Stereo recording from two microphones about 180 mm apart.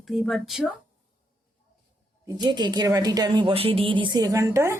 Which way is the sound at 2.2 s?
25° right (ahead or behind).